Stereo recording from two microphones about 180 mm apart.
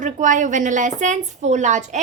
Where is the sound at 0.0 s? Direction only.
45° right (ahead or behind).